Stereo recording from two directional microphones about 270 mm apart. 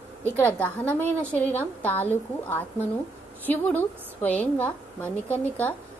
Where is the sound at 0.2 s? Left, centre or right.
Centre.